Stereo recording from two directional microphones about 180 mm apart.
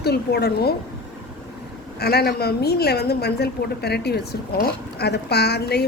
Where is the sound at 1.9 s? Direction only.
60° left (ahead or behind).